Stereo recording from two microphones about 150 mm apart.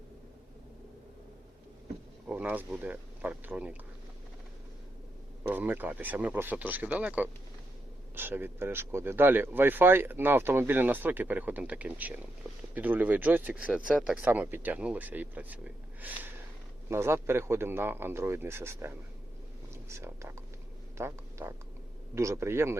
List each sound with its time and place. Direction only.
2.2 s speech: 10° right (ahead or behind)
5.4 s speech: 10° right (ahead or behind)